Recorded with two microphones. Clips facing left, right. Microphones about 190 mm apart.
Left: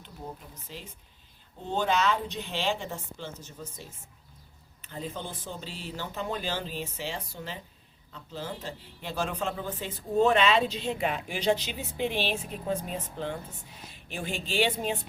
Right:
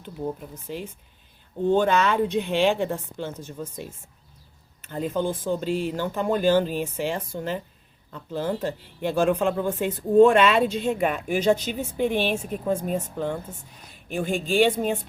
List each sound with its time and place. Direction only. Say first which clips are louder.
0.7 s a woman's voice: right 11 dB; 55° right (ahead or behind)